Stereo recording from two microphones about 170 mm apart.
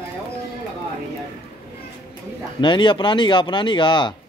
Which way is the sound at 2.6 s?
30° left (ahead or behind).